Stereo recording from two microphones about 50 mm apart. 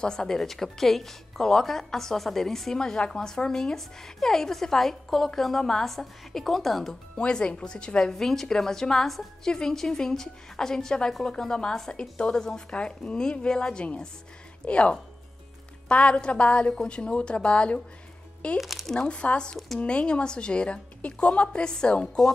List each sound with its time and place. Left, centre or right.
0.0 s a woman's voice: centre
7.2 s a woman's voice: centre
18.6 s speech: centre
18.9 s a woman's voice: left